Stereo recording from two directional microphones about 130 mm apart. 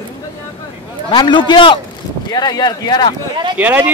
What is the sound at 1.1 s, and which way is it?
A woman's voice, 35° left (ahead or behind).